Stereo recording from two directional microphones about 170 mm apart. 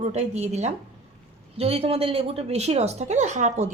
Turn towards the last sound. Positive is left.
turn(degrees=-45)  # may be behind; listen again after turning